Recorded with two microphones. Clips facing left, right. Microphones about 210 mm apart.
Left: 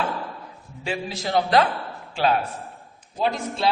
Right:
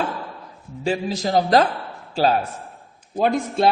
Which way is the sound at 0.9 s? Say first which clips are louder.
Right 5 dB; 40° right (ahead or behind).